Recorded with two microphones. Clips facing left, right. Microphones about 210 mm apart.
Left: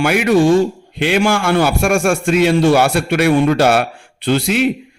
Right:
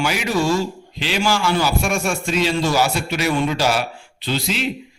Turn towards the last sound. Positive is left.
turn(degrees=60)  # may be behind; listen again after turning